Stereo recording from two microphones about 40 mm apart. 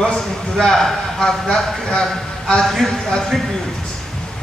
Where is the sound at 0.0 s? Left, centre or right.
Centre.